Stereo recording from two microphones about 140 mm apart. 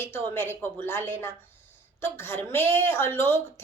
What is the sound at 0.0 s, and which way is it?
Speech, 15° left (ahead or behind).